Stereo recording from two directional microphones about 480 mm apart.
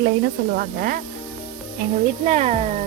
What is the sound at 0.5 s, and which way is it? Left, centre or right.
Speech, centre.